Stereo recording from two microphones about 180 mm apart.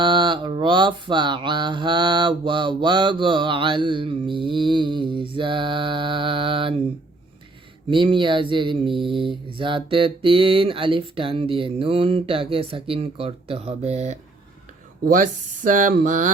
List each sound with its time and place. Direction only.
0.0 s mantra: 25° right (ahead or behind)
7.9 s mantra: 25° right (ahead or behind)
15.0 s speech: 45° right (ahead or behind)